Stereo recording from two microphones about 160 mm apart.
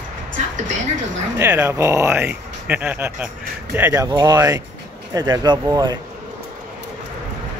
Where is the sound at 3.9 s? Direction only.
25° right (ahead or behind).